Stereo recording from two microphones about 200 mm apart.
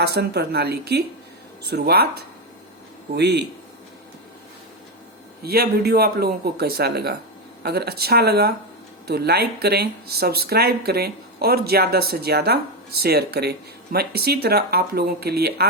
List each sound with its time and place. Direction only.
0.0 s a woman's voice: 55° right (ahead or behind)
5.4 s speech: 50° right (ahead or behind)